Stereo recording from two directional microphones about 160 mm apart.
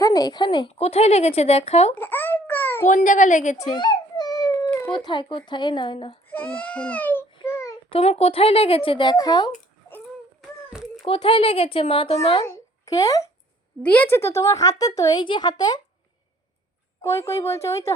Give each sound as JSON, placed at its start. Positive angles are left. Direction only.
{"t": 0.0, "sound": "a woman's voice", "side_deg": 25}
{"t": 2.0, "sound": "babbling", "side_deg": 15}
{"t": 2.9, "sound": "a woman's voice", "side_deg": 50}
{"t": 3.8, "sound": "a sound", "side_deg": 25}
{"t": 4.9, "sound": "a woman's voice", "side_deg": 30}
{"t": 6.3, "sound": "speech", "side_deg": 10}
{"t": 7.9, "sound": "a woman's voice", "side_deg": 40}
{"t": 11.0, "sound": "a woman's voice", "side_deg": 35}
{"t": 12.5, "sound": "babbling", "side_deg": 20}
{"t": 13.8, "sound": "a woman's voice", "side_deg": 10}
{"t": 17.0, "sound": "speech", "side_deg": 15}